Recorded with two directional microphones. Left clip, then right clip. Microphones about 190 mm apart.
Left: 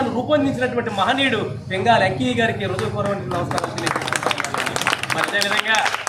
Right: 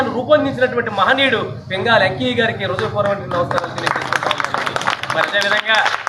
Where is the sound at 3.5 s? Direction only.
25° right (ahead or behind).